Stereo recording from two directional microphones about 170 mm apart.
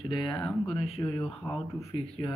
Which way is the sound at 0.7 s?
35° left (ahead or behind).